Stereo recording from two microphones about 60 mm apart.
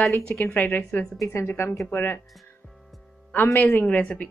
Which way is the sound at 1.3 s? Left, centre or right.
Left.